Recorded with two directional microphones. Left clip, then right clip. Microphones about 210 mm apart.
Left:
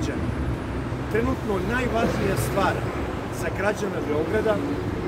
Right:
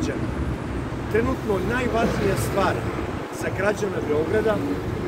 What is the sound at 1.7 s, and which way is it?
Speech, centre (ahead or behind).